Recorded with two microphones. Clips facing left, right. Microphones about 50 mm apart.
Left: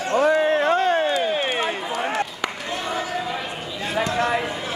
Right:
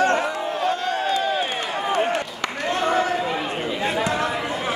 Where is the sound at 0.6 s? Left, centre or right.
Left.